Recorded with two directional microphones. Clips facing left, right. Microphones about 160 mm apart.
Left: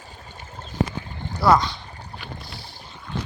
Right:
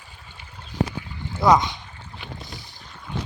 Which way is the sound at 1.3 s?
20° right (ahead or behind).